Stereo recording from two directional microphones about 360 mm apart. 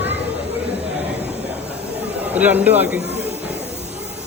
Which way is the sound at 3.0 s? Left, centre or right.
Centre.